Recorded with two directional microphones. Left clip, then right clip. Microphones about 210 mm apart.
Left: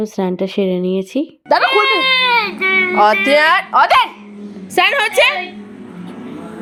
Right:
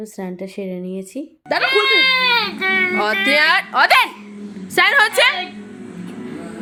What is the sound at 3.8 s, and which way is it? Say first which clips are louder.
Speech: right 1 dB; 35° right (ahead or behind).